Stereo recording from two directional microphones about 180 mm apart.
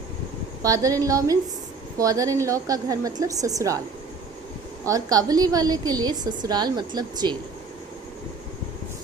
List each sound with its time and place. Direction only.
0.6 s a woman's voice: 20° right (ahead or behind)
4.9 s a woman's voice: 20° right (ahead or behind)